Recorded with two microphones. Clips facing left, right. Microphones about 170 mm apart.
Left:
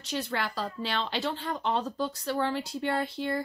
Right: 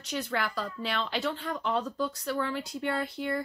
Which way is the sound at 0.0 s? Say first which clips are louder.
Even; 30° left (ahead or behind).